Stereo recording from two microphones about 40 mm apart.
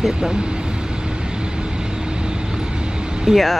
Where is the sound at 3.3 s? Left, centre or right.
Centre.